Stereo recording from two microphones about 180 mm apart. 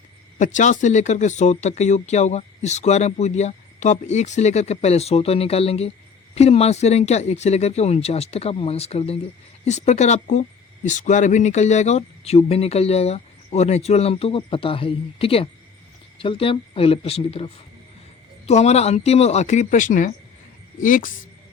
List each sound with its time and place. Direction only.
0.3 s a woman's voice: 45° left (ahead or behind)